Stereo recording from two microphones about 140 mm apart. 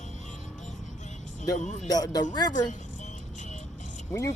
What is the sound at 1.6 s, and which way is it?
Speech, 60° left (ahead or behind).